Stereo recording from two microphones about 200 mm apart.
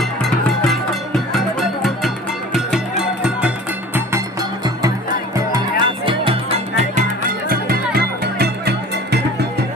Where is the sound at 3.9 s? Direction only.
15° right (ahead or behind); by 9.1 s 55° right (ahead or behind).